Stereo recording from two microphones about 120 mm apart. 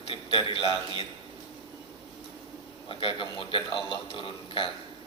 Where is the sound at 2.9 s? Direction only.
45° left (ahead or behind).